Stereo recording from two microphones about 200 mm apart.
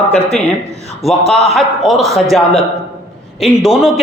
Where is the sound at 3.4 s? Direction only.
Centre (ahead or behind).